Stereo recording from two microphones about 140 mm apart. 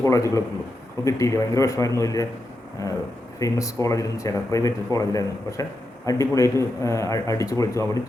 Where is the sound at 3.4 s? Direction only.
25° left (ahead or behind).